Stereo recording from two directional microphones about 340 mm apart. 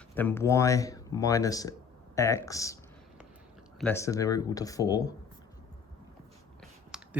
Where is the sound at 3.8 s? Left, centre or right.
Centre.